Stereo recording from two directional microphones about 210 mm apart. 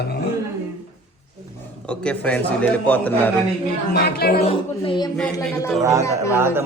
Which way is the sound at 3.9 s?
45° left (ahead or behind).